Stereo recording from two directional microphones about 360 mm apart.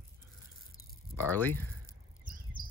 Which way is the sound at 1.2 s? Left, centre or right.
Centre.